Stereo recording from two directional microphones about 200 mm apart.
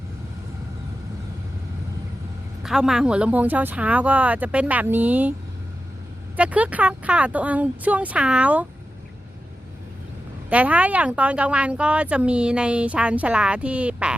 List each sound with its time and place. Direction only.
2.6 s speech: centre (ahead or behind)
6.3 s speech: 5° right (ahead or behind)
10.5 s speech: 5° right (ahead or behind)